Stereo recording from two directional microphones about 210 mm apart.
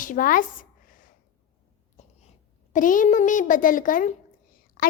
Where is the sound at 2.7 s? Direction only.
40° left (ahead or behind).